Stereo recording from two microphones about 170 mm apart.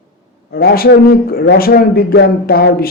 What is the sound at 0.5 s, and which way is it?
A man's voice, 60° left (ahead or behind).